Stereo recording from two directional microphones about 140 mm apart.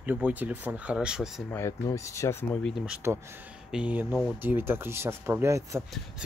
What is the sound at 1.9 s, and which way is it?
Speech, 20° left (ahead or behind).